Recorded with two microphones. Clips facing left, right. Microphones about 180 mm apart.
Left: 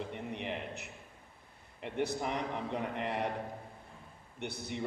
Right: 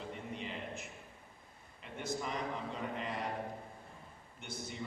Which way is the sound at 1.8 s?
70° left (ahead or behind).